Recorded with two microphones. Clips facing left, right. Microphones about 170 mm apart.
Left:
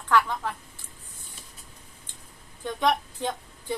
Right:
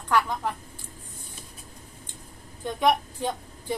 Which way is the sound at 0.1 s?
15° right (ahead or behind).